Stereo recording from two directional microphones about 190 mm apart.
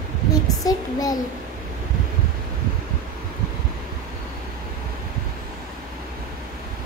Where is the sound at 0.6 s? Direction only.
20° left (ahead or behind).